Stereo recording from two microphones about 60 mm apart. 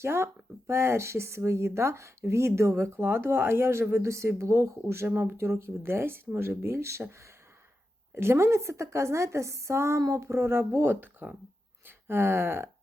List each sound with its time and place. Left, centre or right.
0.0 s speech: right
8.1 s speech: right
10.0 s speech: right
11.9 s a sound: right